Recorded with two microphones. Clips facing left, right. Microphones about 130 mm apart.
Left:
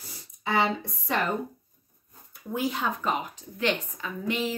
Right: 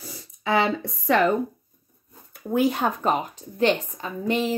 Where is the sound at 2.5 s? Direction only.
55° right (ahead or behind).